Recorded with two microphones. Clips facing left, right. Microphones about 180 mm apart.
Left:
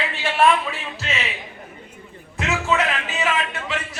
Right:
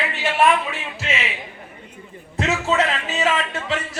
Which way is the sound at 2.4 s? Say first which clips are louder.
Right 2 dB; 30° right (ahead or behind).